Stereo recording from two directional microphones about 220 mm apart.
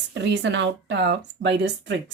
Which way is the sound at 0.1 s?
55° right (ahead or behind).